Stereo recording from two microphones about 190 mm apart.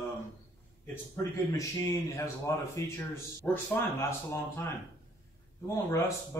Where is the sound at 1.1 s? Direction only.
15° left (ahead or behind).